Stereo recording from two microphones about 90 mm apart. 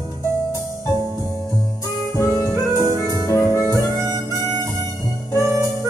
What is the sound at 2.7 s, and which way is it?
Music, 45° right (ahead or behind).